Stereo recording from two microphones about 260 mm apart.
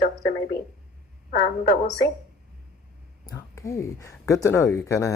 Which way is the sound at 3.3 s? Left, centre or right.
Centre.